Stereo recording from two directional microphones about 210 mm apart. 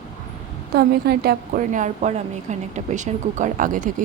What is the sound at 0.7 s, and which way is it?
A woman's voice, 50° right (ahead or behind).